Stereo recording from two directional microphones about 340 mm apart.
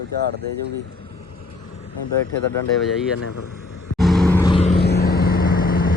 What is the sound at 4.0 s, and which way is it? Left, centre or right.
Vehicle, centre.